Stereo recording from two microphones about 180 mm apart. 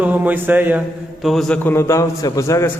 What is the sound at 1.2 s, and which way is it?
A man's voice, centre (ahead or behind).